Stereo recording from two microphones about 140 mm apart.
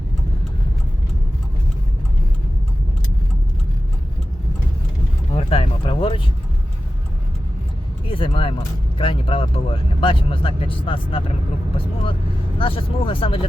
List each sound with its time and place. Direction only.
5.3 s a sound: 45° left (ahead or behind)
8.1 s speech: 40° left (ahead or behind)
12.5 s speech: 40° left (ahead or behind)